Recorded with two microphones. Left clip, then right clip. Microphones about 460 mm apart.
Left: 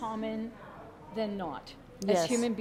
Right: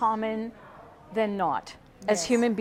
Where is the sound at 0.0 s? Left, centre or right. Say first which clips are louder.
Right 10 dB; right.